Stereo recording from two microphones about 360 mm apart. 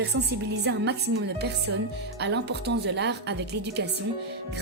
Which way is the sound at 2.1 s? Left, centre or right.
Right.